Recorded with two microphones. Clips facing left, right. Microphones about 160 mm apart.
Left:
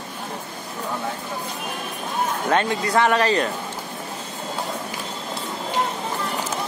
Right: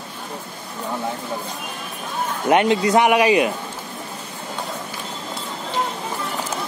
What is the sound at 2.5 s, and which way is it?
A man's voice, 20° right (ahead or behind).